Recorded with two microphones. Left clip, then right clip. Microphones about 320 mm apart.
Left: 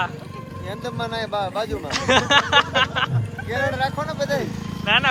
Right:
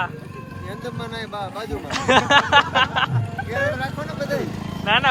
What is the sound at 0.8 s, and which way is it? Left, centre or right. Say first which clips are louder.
Speech: left 5 dB; centre.